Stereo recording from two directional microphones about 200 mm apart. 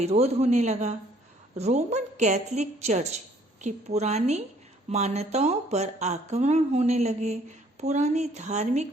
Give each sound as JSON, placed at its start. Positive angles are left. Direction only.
{"t": 0.0, "sound": "speech", "side_deg": -30}